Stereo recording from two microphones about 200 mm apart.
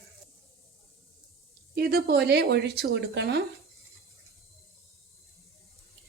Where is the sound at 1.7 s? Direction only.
50° right (ahead or behind).